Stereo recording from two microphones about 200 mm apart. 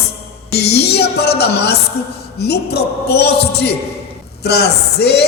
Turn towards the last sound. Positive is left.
turn(degrees=55)  # may be behind; listen again after turning